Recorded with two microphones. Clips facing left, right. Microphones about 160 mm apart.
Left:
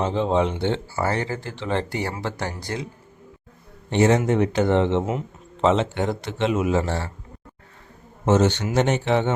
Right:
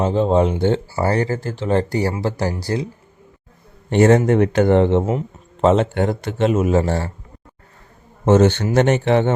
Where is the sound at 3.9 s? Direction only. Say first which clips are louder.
Right 5 dB; 50° right (ahead or behind).